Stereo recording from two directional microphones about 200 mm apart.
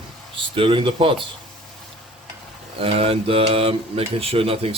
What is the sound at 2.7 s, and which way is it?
Speech, 30° right (ahead or behind).